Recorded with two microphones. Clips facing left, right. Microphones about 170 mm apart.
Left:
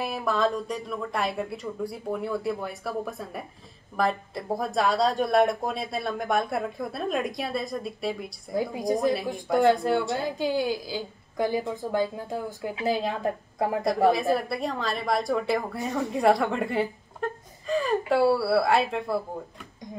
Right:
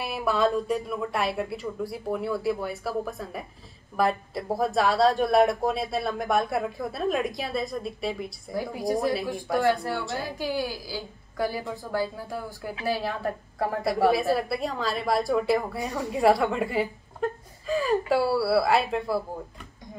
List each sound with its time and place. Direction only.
0.0 s a woman's voice: 5° right (ahead or behind)
8.5 s a woman's voice: 20° left (ahead or behind)
14.3 s a woman's voice: centre (ahead or behind)